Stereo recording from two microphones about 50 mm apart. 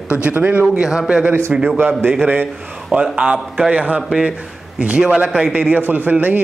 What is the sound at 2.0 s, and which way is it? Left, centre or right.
Speech, right.